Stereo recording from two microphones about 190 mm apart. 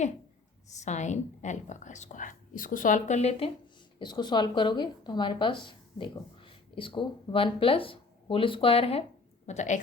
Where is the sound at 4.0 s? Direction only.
20° left (ahead or behind).